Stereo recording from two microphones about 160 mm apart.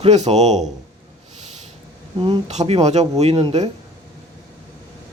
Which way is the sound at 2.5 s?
45° right (ahead or behind).